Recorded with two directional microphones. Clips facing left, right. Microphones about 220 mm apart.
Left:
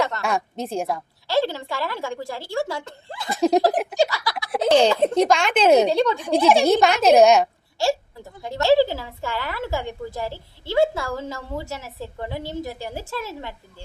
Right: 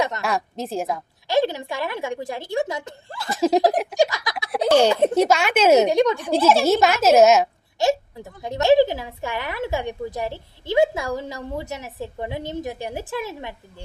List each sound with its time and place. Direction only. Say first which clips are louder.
0.2 s a woman's voice: even; centre (ahead or behind)
1.3 s a woman's voice: right 1 dB; 15° right (ahead or behind)
3.2 s a woman's voice: even; centre (ahead or behind)
3.9 s a sound: right 1 dB; 15° right (ahead or behind)
4.5 s a woman's voice: even; 5° right (ahead or behind)
6.7 s a woman's voice: left 1 dB; 5° right (ahead or behind)
7.8 s a woman's voice: right 2 dB; 20° right (ahead or behind)